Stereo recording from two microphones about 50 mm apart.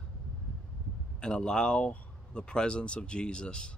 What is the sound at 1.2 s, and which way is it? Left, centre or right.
Speech, centre.